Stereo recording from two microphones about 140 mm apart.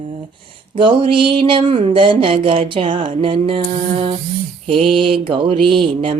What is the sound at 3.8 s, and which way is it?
Music, 45° right (ahead or behind).